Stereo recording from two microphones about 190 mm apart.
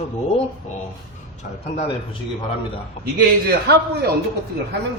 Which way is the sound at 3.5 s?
55° right (ahead or behind).